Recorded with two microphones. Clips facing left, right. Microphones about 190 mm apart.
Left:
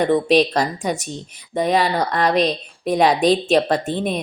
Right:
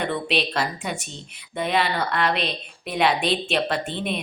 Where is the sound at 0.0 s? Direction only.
40° left (ahead or behind).